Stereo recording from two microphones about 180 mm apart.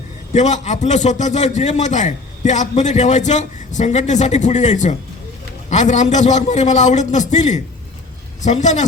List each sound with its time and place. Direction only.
0.3 s a man's voice: 40° left (ahead or behind)